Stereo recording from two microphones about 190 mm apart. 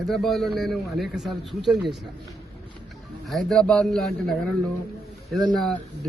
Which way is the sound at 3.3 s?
Centre (ahead or behind).